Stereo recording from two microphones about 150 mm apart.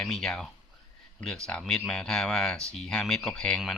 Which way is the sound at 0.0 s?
Centre (ahead or behind).